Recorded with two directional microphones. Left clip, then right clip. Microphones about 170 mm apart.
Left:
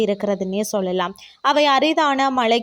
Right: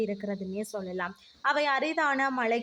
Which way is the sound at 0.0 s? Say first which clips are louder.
Left 12 dB; 45° left (ahead or behind).